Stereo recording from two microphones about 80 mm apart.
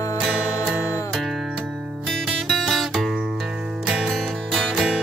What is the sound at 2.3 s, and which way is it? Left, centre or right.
Music, centre.